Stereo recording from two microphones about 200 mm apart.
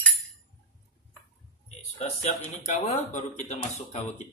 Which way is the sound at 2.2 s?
35° left (ahead or behind).